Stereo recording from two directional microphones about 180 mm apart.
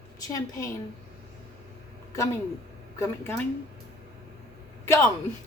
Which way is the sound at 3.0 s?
10° left (ahead or behind).